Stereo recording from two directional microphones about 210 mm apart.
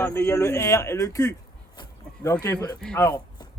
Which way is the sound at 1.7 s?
20° left (ahead or behind).